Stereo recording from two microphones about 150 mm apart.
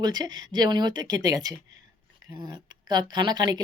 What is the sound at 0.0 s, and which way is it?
A woman's voice, 30° right (ahead or behind).